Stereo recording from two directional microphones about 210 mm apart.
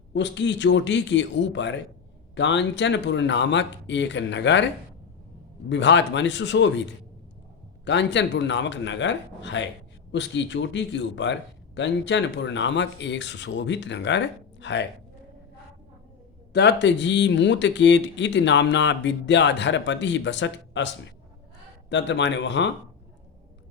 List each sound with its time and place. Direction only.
0.1 s a man's voice: 60° left (ahead or behind)
7.9 s a man's voice: 55° left (ahead or behind)
16.5 s a man's voice: 55° left (ahead or behind)